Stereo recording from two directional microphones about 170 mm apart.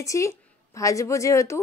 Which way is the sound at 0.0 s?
20° left (ahead or behind).